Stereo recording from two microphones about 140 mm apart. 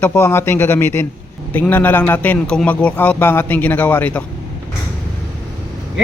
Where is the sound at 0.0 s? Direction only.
15° left (ahead or behind).